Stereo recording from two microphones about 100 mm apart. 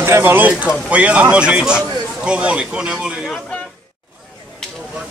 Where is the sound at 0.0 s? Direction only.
25° right (ahead or behind).